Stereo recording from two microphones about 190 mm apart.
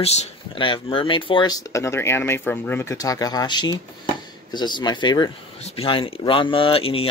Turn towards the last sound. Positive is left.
turn(degrees=30)  # may be behind; listen again after turning